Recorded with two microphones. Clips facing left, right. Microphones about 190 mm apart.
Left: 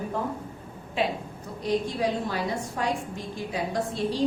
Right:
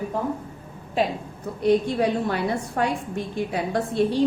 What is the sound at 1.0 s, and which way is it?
Speech, 40° right (ahead or behind).